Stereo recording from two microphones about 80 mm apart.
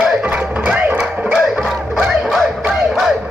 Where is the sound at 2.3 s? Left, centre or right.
Centre.